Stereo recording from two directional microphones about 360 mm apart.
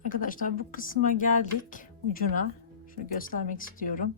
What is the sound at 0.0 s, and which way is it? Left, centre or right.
Speech, left.